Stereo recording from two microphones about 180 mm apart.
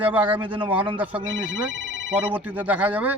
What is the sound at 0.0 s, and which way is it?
Speech, 10° right (ahead or behind).